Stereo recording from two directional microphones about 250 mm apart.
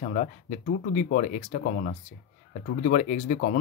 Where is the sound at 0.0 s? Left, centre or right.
Left.